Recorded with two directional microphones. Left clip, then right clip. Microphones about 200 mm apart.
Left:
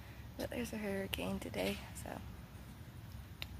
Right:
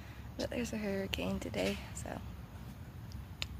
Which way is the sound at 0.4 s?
5° right (ahead or behind).